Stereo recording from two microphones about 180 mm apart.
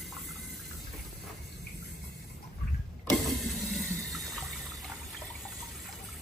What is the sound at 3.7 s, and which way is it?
Water, centre (ahead or behind).